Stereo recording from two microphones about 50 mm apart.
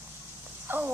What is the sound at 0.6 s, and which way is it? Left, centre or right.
Horse, right.